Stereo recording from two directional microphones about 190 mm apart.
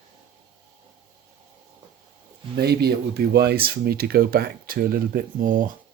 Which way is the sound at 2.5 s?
55° right (ahead or behind).